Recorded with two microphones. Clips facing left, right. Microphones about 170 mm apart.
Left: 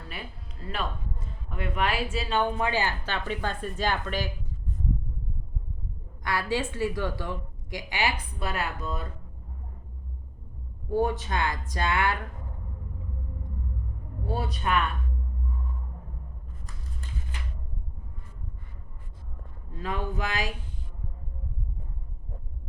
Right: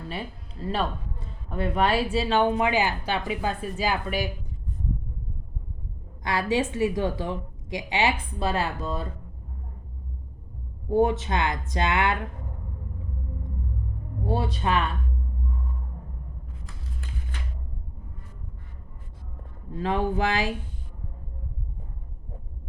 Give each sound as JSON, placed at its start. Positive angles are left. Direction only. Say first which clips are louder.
{"t": 0.7, "sound": "a man's voice", "louder": "right 5 dB", "side_deg": -35}
{"t": 6.2, "sound": "a woman's voice", "louder": "right 4 dB", "side_deg": -20}
{"t": 10.8, "sound": "a woman's voice", "louder": "right 4 dB", "side_deg": -25}
{"t": 14.3, "sound": "a woman's voice", "louder": "right 3 dB", "side_deg": -25}
{"t": 19.8, "sound": "a woman's voice", "louder": "right 7 dB", "side_deg": -30}